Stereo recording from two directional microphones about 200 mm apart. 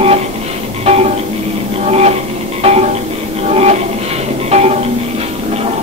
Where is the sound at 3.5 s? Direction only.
30° right (ahead or behind).